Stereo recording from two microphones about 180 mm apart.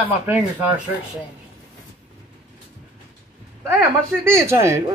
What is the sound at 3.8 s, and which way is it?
Speech, 15° right (ahead or behind).